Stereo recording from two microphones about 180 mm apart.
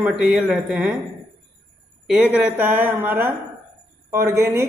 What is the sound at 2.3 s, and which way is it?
A man's voice, 10° right (ahead or behind).